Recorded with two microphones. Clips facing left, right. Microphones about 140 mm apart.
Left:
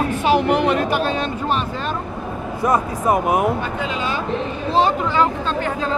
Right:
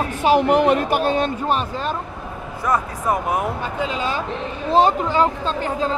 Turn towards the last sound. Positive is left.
turn(degrees=-35)  # may be behind; listen again after turning